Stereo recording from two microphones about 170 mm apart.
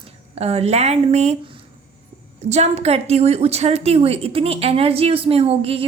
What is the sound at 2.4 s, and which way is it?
A woman's voice, 40° right (ahead or behind).